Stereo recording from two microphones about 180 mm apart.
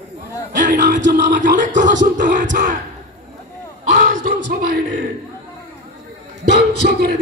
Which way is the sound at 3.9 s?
45° right (ahead or behind).